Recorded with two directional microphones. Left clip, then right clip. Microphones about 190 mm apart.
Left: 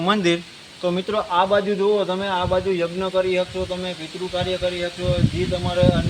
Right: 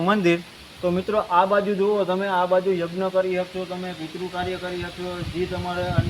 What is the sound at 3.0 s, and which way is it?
Speech, 30° left (ahead or behind).